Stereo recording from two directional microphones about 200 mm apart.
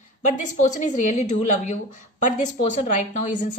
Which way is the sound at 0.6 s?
40° left (ahead or behind).